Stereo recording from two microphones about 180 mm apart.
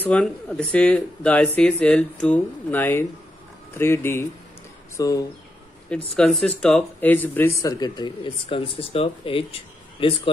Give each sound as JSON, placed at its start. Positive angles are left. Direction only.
{"t": 0.0, "sound": "speech", "side_deg": 5}
{"t": 6.1, "sound": "speech", "side_deg": 5}